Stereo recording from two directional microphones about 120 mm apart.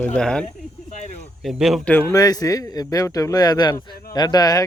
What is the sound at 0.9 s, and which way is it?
Speech, 75° left (ahead or behind).